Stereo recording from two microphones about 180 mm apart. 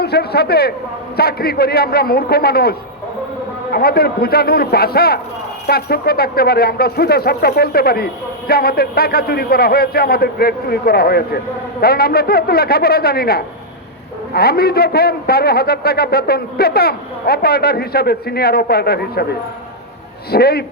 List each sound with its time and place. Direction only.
0.0 s speech: 60° left (ahead or behind)
20.3 s speech: 60° left (ahead or behind)